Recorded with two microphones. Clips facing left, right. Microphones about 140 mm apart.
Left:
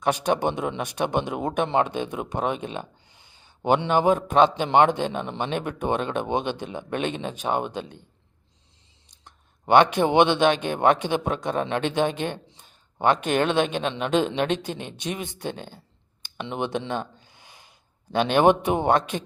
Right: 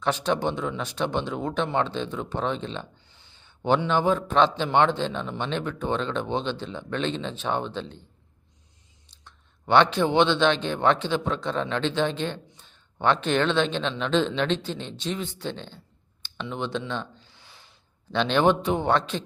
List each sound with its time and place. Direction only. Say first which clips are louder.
0.3 s speech: left 2 dB; 20° left (ahead or behind)
3.8 s speech: left 3 dB; 15° left (ahead or behind)
9.2 s a sound: left 3 dB; 15° left (ahead or behind)
10.0 s speech: left 2 dB; 15° left (ahead or behind)
17.3 s rub: left 2 dB; 15° left (ahead or behind)
18.2 s speech: left 3 dB; 15° left (ahead or behind)